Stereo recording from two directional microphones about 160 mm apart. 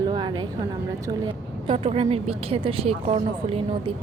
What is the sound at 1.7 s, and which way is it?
A woman's voice, 40° right (ahead or behind).